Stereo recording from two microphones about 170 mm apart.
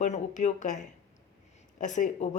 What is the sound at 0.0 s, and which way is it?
Speech, 45° left (ahead or behind).